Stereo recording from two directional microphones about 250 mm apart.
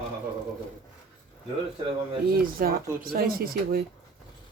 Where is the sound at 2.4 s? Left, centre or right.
Right.